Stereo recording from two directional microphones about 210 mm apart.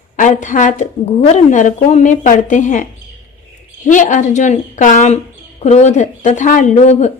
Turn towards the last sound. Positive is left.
turn(degrees=35)  # may be behind; listen again after turning